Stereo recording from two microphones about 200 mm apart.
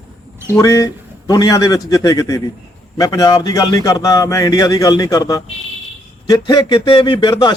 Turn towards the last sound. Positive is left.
turn(degrees=20)  # may be behind; listen again after turning